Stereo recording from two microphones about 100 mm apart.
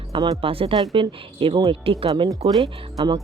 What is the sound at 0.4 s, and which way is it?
Speech, 65° right (ahead or behind).